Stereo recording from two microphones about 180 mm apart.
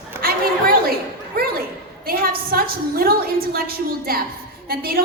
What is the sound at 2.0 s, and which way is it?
A woman's voice, 55° right (ahead or behind).